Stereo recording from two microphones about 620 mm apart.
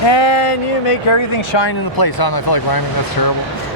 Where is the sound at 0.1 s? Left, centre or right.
Left.